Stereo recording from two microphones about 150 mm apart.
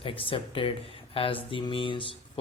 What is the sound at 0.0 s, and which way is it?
Speech, 35° left (ahead or behind).